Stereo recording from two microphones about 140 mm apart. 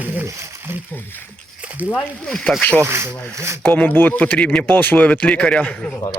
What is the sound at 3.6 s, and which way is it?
Speech, 10° left (ahead or behind).